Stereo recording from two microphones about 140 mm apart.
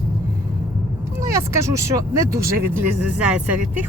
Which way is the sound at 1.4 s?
20° right (ahead or behind).